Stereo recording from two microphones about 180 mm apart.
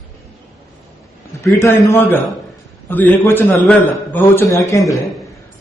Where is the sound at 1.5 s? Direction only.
15° left (ahead or behind).